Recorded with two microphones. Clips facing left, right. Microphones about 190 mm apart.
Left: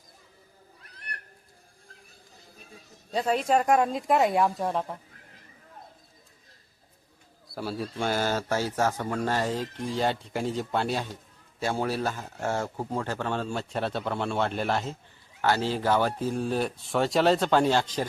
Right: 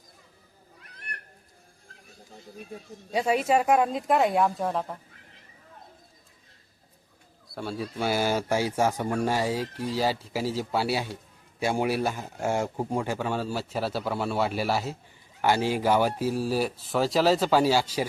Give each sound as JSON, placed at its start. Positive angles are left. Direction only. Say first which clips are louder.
{"t": 3.1, "sound": "speech", "louder": "right 1 dB", "side_deg": -10}
{"t": 7.5, "sound": "speech", "louder": "even", "side_deg": 0}